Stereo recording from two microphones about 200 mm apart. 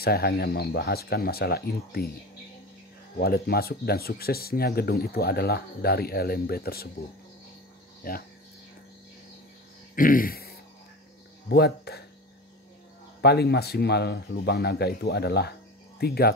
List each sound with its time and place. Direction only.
0.0 s speech: 50° left (ahead or behind)
3.2 s speech: 50° left (ahead or behind)
8.0 s speech: 45° left (ahead or behind)
9.9 s speech: 45° left (ahead or behind)
13.2 s speech: 55° left (ahead or behind)